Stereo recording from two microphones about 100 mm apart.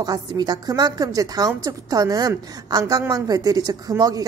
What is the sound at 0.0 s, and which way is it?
A woman's voice, 40° right (ahead or behind).